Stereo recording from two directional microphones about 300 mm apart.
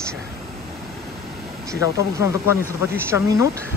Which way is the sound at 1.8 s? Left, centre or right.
Centre.